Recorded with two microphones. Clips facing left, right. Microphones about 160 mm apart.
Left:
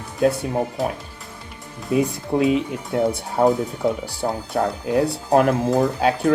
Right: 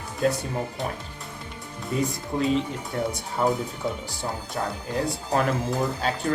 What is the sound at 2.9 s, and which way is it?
Speech, 75° left (ahead or behind).